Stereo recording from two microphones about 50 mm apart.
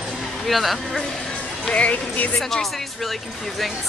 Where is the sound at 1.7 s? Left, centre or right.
Left.